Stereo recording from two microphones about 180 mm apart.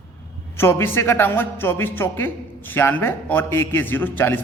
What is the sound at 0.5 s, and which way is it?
A man's voice, 15° left (ahead or behind).